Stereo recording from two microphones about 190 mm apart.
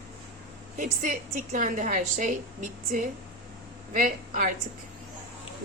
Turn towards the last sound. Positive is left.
turn(degrees=-45)  # may be behind; listen again after turning